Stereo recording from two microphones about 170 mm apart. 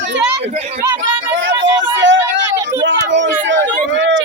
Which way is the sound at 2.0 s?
90° right.